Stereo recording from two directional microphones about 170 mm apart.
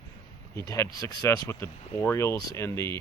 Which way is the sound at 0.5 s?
20° left (ahead or behind).